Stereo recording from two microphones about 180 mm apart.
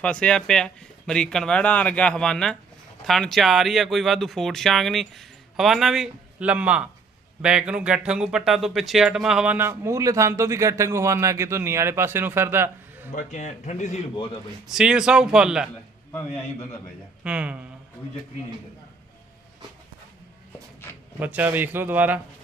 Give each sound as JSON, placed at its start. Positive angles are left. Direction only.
{"t": 0.0, "sound": "speech", "side_deg": 5}
{"t": 13.1, "sound": "speech", "side_deg": 45}
{"t": 14.7, "sound": "speech", "side_deg": -5}
{"t": 16.1, "sound": "a man's voice", "side_deg": 10}
{"t": 17.2, "sound": "speech", "side_deg": -5}
{"t": 21.2, "sound": "speech", "side_deg": -10}